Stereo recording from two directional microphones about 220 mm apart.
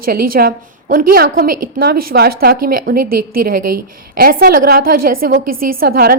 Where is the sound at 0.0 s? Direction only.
45° right (ahead or behind).